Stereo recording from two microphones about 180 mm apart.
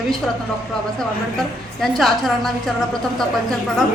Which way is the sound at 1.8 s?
Centre (ahead or behind).